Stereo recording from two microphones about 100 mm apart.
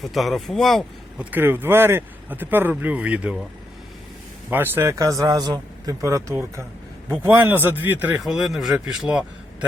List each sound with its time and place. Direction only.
0.0 s a man's voice: centre (ahead or behind)
1.2 s speech: 20° right (ahead or behind)
4.5 s speech: 20° right (ahead or behind)
8.2 s a man's voice: 5° right (ahead or behind)